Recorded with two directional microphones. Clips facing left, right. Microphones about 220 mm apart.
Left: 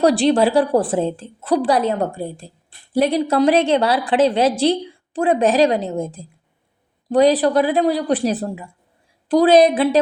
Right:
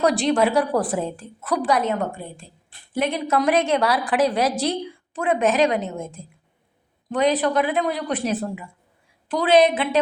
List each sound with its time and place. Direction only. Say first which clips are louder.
0.0 s a woman's voice: left 4 dB; 30° left (ahead or behind)